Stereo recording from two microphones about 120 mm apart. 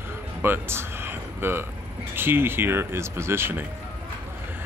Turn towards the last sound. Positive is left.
turn(degrees=-20)  # may be behind; listen again after turning